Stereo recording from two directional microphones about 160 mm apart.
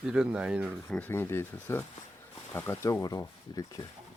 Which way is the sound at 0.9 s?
10° left (ahead or behind).